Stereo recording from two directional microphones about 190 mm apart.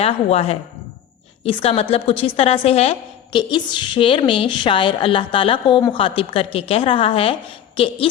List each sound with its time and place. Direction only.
0.0 s a woman's voice: 30° left (ahead or behind)